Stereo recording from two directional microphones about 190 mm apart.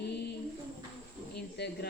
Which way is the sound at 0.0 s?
65° left (ahead or behind).